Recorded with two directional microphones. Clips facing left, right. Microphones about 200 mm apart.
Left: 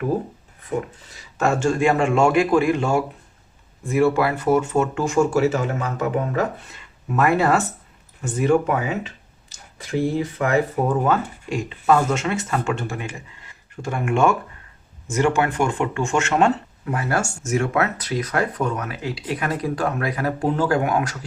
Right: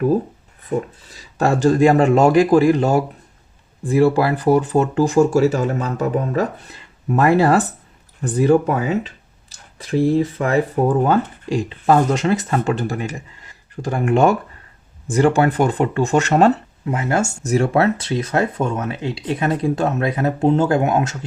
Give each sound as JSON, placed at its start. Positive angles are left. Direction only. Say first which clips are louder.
{"t": 1.4, "sound": "speech", "louder": "right 5 dB", "side_deg": -35}
{"t": 16.8, "sound": "speech", "louder": "right 4 dB", "side_deg": -20}
{"t": 17.4, "sound": "speech", "louder": "right 6 dB", "side_deg": -35}